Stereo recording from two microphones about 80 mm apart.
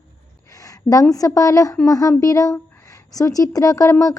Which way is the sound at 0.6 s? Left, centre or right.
Left.